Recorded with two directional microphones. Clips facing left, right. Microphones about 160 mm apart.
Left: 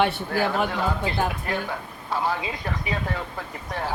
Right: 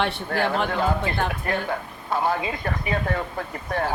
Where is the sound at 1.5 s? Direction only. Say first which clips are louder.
Right 2 dB; 55° right (ahead or behind).